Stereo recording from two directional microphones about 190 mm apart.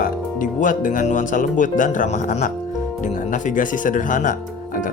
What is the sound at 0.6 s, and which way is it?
Speech, 45° left (ahead or behind).